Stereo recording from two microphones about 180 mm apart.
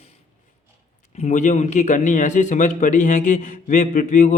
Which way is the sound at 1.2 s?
40° left (ahead or behind).